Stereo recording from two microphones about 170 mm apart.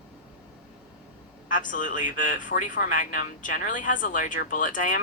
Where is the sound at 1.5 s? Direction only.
50° left (ahead or behind).